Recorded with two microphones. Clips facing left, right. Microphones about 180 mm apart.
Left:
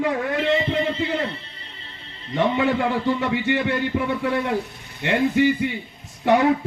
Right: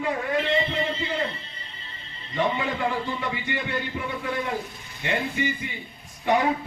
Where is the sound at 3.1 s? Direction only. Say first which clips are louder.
Left 8 dB; 80° left.